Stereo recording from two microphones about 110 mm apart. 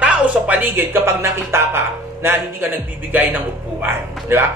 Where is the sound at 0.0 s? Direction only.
15° right (ahead or behind).